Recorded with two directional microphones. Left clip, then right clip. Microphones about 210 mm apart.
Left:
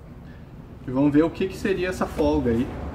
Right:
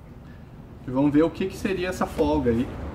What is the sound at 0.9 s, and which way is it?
Speech, 5° right (ahead or behind).